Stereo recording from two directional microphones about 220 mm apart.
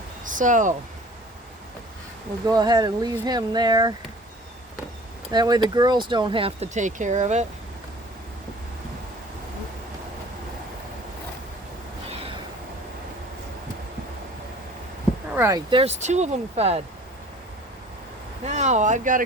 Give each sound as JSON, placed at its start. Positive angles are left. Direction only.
{"t": 0.3, "sound": "speech", "side_deg": -35}
{"t": 2.5, "sound": "speech", "side_deg": -20}
{"t": 5.3, "sound": "speech", "side_deg": -20}
{"t": 15.4, "sound": "speech", "side_deg": -15}
{"t": 18.4, "sound": "speech", "side_deg": -30}